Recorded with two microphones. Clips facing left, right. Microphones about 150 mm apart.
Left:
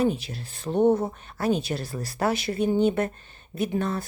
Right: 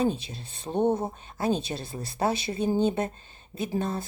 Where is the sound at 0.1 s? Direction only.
25° right (ahead or behind).